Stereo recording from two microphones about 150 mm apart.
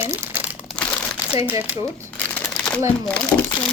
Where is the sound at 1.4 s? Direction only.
15° right (ahead or behind).